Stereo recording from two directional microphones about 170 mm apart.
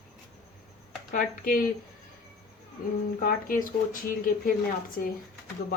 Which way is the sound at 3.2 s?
55° left (ahead or behind).